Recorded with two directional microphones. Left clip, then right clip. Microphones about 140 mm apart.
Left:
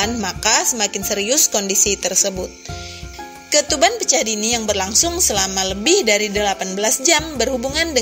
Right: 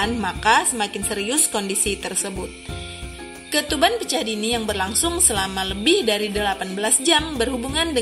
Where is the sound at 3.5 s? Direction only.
55° left (ahead or behind).